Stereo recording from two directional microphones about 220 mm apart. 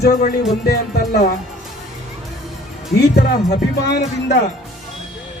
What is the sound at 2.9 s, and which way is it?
Speech, 50° left (ahead or behind).